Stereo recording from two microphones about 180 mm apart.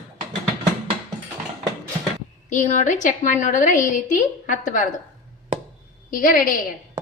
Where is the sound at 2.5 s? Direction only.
40° left (ahead or behind).